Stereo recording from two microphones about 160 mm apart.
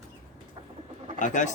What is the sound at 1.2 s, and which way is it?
Speech, 50° left (ahead or behind).